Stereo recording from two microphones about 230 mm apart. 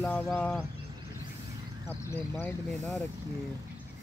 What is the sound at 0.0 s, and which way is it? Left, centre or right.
Speech, centre.